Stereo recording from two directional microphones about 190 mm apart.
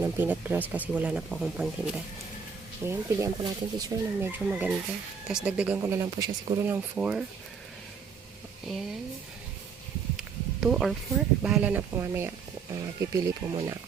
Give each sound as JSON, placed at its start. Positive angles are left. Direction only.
{"t": 0.0, "sound": "speech", "side_deg": -10}
{"t": 2.8, "sound": "speech", "side_deg": -15}
{"t": 8.6, "sound": "speech", "side_deg": 0}
{"t": 10.2, "sound": "a sound", "side_deg": -5}
{"t": 11.4, "sound": "speech", "side_deg": -5}